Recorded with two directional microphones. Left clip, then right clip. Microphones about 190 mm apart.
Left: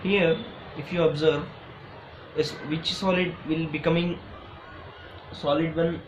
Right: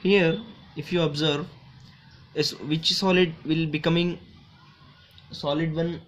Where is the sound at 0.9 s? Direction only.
45° right (ahead or behind).